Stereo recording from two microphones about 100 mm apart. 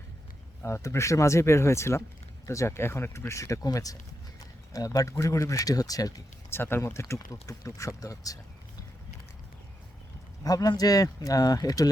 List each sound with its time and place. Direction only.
0.6 s speech: 30° left (ahead or behind)
6.5 s speech: 25° left (ahead or behind)
10.4 s speech: 40° left (ahead or behind)